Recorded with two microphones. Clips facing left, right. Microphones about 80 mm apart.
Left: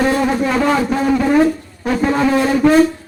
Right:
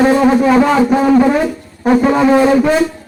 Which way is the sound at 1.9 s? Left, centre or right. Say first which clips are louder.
Right 5 dB; right.